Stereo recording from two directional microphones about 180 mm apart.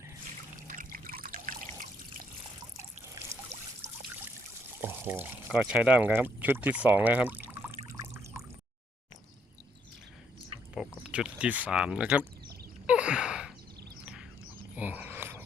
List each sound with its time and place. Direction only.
0.7 s trickle: 50° right (ahead or behind)
3.5 s trickle: 35° right (ahead or behind)
4.8 s speech: 10° right (ahead or behind)
7.9 s pour: 15° right (ahead or behind)
10.8 s speech: 5° right (ahead or behind)
12.9 s a sound: 5° right (ahead or behind)